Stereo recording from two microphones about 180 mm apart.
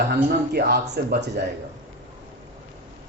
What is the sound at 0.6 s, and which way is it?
Speech, 65° right (ahead or behind).